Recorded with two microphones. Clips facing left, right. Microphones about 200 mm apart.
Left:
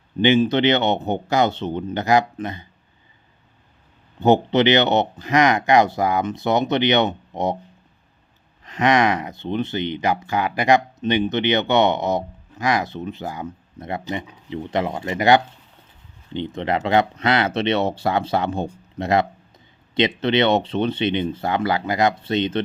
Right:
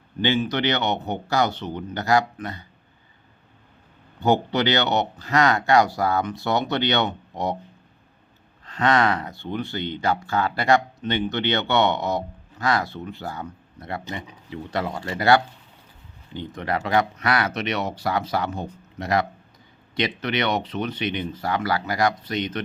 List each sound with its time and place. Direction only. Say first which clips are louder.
0.2 s speech: left 6 dB; 25° left (ahead or behind)
4.2 s speech: left 5 dB; 20° left (ahead or behind)
8.6 s speech: left 3 dB; 15° left (ahead or behind)